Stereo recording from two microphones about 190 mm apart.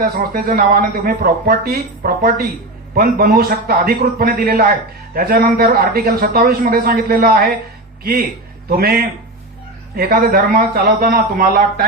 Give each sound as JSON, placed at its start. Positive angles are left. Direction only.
{"t": 0.0, "sound": "a man's voice", "side_deg": -50}
{"t": 8.7, "sound": "a man's voice", "side_deg": -50}